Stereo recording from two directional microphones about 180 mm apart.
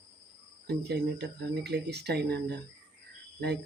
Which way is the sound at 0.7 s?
65° right (ahead or behind).